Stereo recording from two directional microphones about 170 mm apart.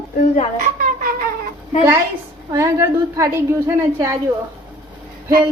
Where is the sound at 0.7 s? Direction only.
55° right (ahead or behind).